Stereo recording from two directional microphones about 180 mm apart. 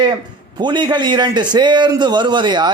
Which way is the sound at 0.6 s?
25° right (ahead or behind).